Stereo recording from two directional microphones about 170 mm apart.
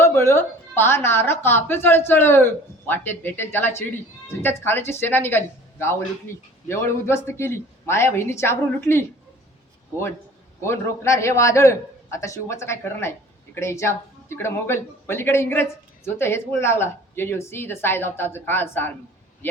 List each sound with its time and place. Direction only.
0.0 s a man's voice: 15° left (ahead or behind)
10.6 s a man's voice: 15° left (ahead or behind)